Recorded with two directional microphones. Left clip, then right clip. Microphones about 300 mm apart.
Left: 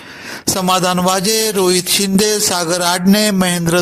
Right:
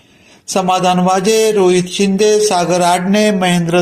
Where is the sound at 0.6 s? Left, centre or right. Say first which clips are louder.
Right 2 dB; left.